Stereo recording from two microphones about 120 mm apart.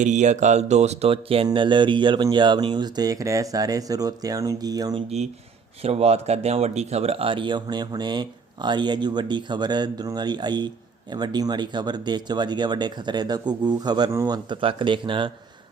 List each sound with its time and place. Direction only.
0.0 s speech: 85° right; by 5.0 s 35° right (ahead or behind)
5.0 s speech: 65° right (ahead or behind); by 15.3 s 45° right (ahead or behind)